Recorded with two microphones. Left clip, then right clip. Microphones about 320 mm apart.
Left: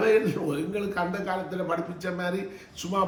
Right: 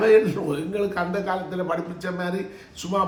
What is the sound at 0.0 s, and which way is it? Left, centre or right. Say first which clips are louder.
A man's voice: right 5 dB; centre.